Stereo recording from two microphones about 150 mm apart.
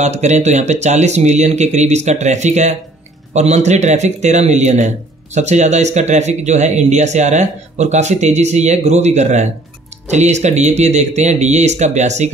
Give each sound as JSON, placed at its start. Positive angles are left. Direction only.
{"t": 0.0, "sound": "a man's voice", "side_deg": -50}